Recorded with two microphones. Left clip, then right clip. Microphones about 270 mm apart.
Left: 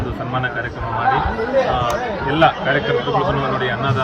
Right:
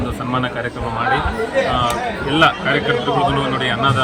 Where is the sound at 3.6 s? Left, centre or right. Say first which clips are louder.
Right 3 dB; centre.